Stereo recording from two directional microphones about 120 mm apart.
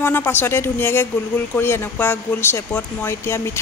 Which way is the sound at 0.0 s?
15° left (ahead or behind).